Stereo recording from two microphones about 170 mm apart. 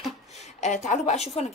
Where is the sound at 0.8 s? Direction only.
40° left (ahead or behind).